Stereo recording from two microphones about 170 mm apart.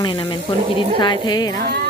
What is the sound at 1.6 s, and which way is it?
Speech, 70° right (ahead or behind).